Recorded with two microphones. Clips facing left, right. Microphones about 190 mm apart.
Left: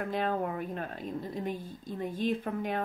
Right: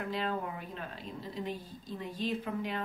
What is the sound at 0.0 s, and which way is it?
A woman's voice, 50° left (ahead or behind).